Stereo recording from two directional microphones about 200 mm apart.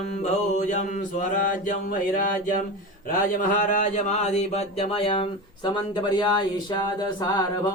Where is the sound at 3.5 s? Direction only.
40° left (ahead or behind); by 7.4 s 20° left (ahead or behind).